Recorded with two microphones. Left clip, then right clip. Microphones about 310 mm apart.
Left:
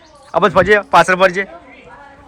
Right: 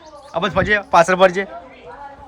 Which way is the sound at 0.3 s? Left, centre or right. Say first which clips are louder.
Left 6 dB; centre.